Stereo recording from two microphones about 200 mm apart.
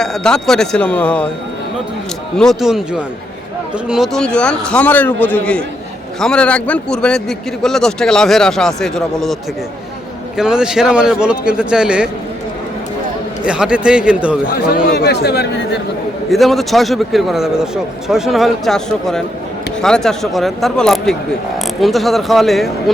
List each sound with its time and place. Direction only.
0.0 s a man's voice: 5° left (ahead or behind)
2.4 s a man's voice: centre (ahead or behind)
10.3 s a man's voice: 5° right (ahead or behind)
13.4 s a man's voice: 5° right (ahead or behind)
14.9 s speech: 55° left (ahead or behind)
16.3 s a man's voice: centre (ahead or behind)